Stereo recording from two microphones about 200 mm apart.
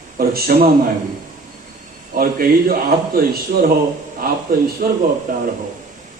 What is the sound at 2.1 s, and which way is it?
Speech, 45° right (ahead or behind).